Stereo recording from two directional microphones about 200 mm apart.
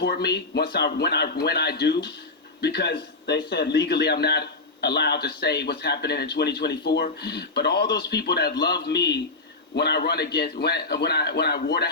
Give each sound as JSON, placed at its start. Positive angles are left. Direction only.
{"t": 0.0, "sound": "a man's voice", "side_deg": 50}